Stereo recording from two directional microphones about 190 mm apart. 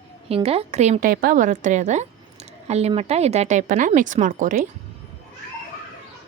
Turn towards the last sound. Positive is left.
turn(degrees=-40)  # may be behind; listen again after turning